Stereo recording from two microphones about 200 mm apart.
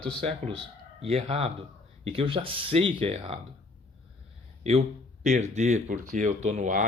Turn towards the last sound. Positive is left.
turn(degrees=-40)  # may be behind; listen again after turning